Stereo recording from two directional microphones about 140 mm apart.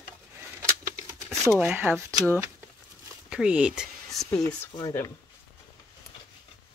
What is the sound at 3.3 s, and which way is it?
Speech, 5° right (ahead or behind).